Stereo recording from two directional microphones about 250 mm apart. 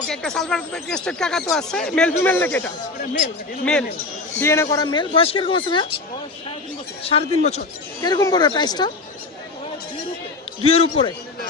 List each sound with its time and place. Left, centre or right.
0.1 s speech: centre
4.4 s speech: centre
7.0 s speech: left
10.6 s speech: left